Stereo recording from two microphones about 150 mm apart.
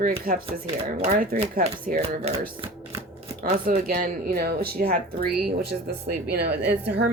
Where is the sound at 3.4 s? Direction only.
80° right.